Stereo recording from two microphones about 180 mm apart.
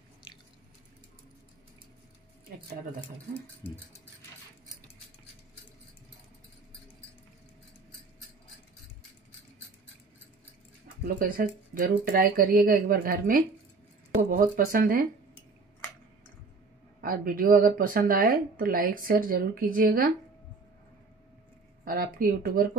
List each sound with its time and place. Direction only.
11.1 s speech: 50° right (ahead or behind)
17.0 s speech: 50° right (ahead or behind)
21.8 s speech: 50° right (ahead or behind)